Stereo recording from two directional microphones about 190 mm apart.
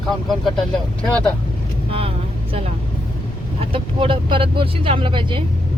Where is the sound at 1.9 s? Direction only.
30° right (ahead or behind).